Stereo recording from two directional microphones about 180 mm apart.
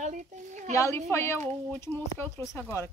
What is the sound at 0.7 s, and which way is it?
Speech, 15° left (ahead or behind).